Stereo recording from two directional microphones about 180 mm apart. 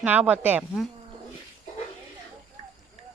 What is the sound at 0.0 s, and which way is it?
Speech, 10° right (ahead or behind).